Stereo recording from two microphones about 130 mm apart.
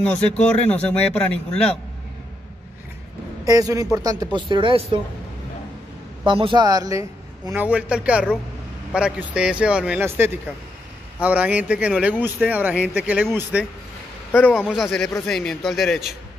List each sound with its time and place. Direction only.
0.0 s speech: 5° left (ahead or behind)
3.4 s speech: 25° right (ahead or behind); by 5.0 s 40° right (ahead or behind)
6.2 s speech: 40° right (ahead or behind); by 7.6 s 25° right (ahead or behind)
7.6 s a man's voice: 10° right (ahead or behind)